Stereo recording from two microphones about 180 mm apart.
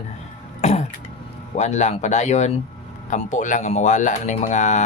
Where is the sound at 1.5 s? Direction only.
40° left (ahead or behind).